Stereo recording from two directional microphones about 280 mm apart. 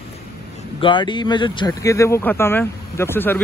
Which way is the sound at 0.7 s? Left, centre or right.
Centre.